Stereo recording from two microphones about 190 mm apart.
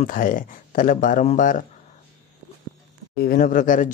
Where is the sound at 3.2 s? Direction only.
50° left (ahead or behind).